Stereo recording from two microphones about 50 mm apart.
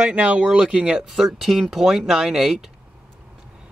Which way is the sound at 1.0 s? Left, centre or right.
Centre.